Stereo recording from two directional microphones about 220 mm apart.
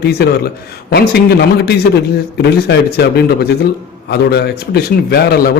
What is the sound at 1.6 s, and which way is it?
A man's voice, 45° left (ahead or behind).